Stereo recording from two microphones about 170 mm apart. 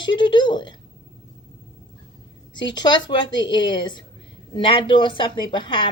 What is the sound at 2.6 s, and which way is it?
A woman's voice, 25° left (ahead or behind).